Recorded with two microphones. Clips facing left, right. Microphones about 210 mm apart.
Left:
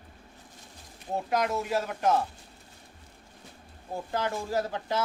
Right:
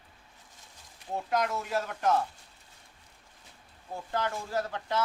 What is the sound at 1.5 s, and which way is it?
Speech, 15° left (ahead or behind).